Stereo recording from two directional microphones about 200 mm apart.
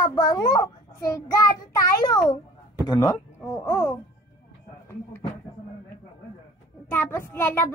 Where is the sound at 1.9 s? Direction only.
20° left (ahead or behind).